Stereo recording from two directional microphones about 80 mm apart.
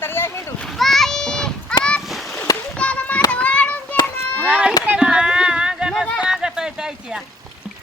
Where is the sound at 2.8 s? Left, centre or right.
Centre.